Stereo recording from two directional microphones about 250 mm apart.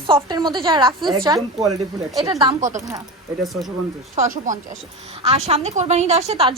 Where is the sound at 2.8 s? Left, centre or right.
Centre.